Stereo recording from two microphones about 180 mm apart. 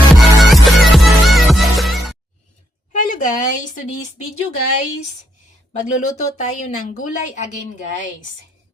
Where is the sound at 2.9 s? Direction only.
45° left (ahead or behind).